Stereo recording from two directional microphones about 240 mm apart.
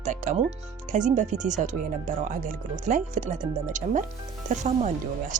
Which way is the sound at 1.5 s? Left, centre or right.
Right.